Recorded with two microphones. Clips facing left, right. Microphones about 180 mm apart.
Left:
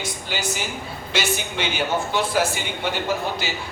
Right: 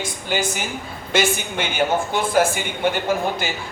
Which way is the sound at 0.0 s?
50° right (ahead or behind).